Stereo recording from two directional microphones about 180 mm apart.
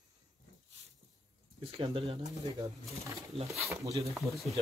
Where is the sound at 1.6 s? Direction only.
30° right (ahead or behind).